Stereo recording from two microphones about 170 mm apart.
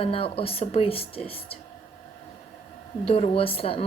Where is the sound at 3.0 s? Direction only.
35° left (ahead or behind).